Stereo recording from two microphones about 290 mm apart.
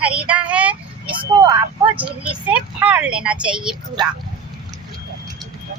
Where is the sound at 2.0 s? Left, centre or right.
Centre.